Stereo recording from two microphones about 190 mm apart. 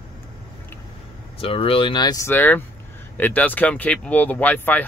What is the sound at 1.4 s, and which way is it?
Speech, 30° left (ahead or behind).